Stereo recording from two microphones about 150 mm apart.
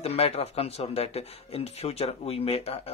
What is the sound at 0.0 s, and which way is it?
Speech, 40° left (ahead or behind).